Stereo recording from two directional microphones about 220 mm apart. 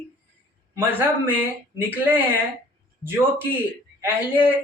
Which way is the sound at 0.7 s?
10° right (ahead or behind).